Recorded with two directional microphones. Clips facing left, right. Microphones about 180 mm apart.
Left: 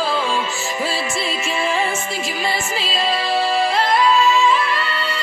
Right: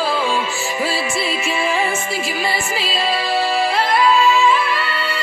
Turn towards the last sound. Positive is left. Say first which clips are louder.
# right 1 dB
turn(degrees=-5)  # may be behind; listen again after turning